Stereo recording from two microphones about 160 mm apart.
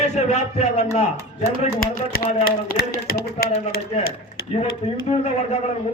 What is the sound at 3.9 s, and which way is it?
Speech, 40° left (ahead or behind).